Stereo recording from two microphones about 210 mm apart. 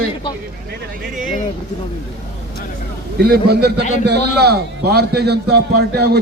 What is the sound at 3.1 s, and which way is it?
A man's voice, 50° right (ahead or behind).